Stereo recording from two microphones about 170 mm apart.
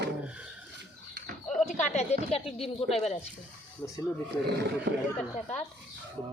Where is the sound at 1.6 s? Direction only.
45° left (ahead or behind).